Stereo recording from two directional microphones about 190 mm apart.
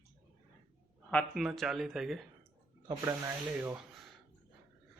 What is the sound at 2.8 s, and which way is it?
Speech, 15° right (ahead or behind).